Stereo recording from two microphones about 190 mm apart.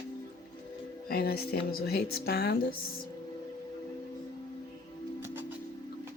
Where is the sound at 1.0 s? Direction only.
55° left (ahead or behind).